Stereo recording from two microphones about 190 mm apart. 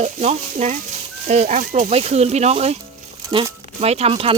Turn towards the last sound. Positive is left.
turn(degrees=-30)  # may be behind; listen again after turning